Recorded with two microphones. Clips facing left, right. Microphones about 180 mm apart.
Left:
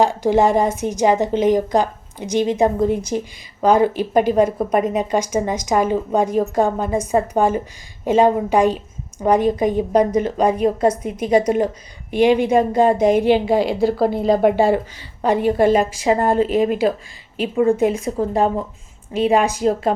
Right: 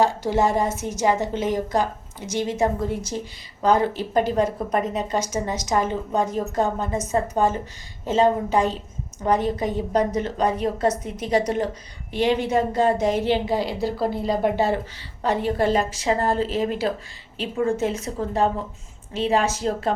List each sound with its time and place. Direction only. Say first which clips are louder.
0.0 s a woman's voice: left 5 dB; 15° left (ahead or behind)
19.1 s a woman's voice: left 5 dB; 15° left (ahead or behind)